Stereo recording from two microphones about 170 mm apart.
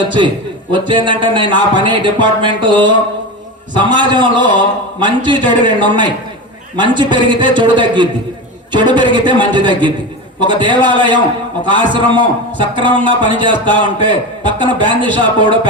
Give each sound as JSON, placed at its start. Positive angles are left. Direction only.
{"t": 0.7, "sound": "a man's voice", "side_deg": -30}